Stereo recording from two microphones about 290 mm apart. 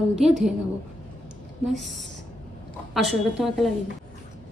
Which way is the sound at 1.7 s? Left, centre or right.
Centre.